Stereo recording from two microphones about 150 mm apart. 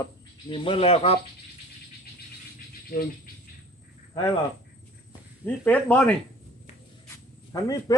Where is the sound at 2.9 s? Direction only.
75° left (ahead or behind).